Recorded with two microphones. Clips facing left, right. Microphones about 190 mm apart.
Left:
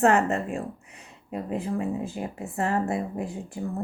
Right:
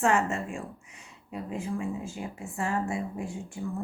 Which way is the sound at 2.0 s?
40° left (ahead or behind).